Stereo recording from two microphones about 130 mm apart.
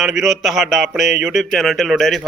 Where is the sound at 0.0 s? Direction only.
5° right (ahead or behind).